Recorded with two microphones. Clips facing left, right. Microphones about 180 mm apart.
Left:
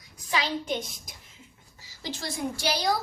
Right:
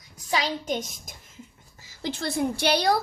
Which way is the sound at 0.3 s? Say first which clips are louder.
Right 2 dB; 40° right (ahead or behind).